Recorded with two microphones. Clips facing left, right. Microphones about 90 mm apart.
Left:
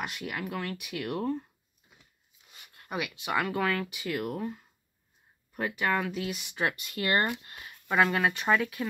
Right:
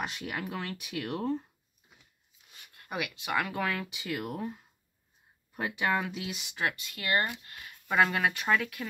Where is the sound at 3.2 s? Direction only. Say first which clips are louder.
Left 3 dB; 5° left (ahead or behind).